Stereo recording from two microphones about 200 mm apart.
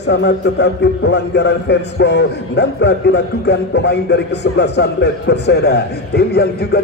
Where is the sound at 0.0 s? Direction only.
60° left (ahead or behind).